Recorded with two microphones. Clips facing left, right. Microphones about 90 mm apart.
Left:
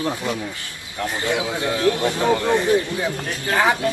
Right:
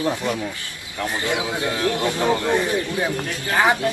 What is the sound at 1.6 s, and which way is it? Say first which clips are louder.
Speech: left 4 dB; 25° left (ahead or behind).